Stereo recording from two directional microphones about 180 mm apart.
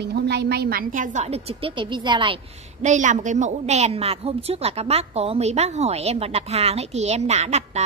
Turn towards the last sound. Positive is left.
turn(degrees=-35)  # may be behind; listen again after turning